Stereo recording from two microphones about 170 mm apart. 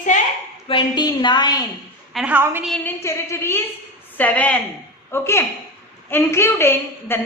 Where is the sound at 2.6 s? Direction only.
5° left (ahead or behind).